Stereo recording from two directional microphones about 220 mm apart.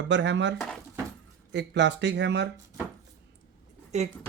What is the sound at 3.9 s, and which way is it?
Speech, 30° right (ahead or behind).